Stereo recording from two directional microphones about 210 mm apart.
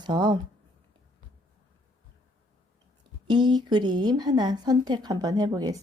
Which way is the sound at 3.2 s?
20° right (ahead or behind).